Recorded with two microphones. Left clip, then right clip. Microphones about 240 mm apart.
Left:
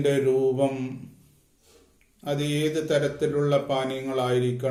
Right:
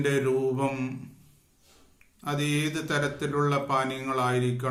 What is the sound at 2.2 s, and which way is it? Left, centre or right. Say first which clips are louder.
Mantra: left 2 dB; centre.